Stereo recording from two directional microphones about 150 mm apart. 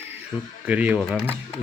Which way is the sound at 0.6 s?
10° right (ahead or behind).